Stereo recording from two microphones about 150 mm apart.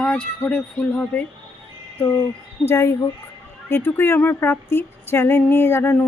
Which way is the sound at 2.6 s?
15° left (ahead or behind).